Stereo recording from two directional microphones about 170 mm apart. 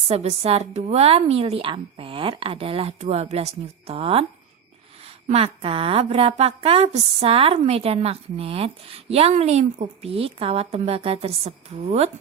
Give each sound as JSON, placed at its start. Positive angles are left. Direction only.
{"t": 0.1, "sound": "a woman's voice", "side_deg": -35}